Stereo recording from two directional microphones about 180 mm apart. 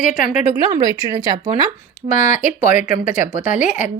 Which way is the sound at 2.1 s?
40° left (ahead or behind).